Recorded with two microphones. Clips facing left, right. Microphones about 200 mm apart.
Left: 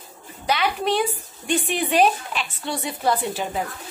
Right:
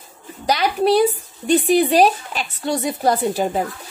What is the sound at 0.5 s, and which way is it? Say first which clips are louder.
A woman's voice: right 5 dB; 40° right (ahead or behind).